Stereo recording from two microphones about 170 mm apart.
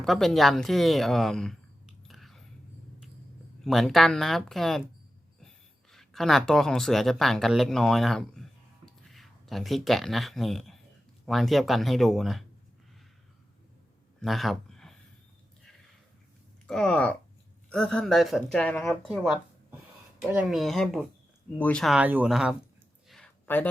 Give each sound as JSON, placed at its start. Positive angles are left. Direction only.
{"t": 0.0, "sound": "speech", "side_deg": 0}
{"t": 3.6, "sound": "speech", "side_deg": 0}
{"t": 5.9, "sound": "speech", "side_deg": 0}
{"t": 14.2, "sound": "a sound", "side_deg": 0}
{"t": 16.6, "sound": "speech", "side_deg": 5}
{"t": 23.0, "sound": "a sound", "side_deg": 5}